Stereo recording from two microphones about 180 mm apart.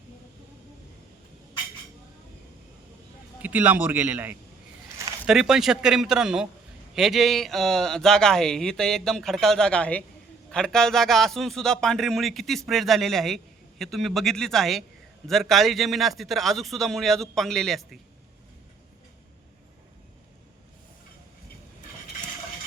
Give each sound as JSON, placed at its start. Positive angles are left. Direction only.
{"t": 3.4, "sound": "a man's voice", "side_deg": -10}